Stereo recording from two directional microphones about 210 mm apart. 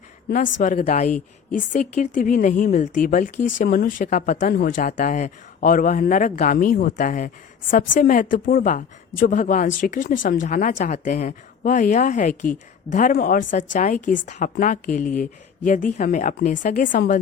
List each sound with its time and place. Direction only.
0.3 s speech: 40° left (ahead or behind)